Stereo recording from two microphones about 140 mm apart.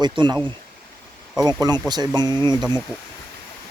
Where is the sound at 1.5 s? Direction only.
30° right (ahead or behind).